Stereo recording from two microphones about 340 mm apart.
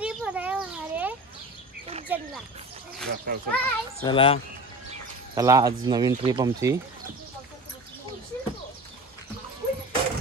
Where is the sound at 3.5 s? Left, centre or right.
Centre.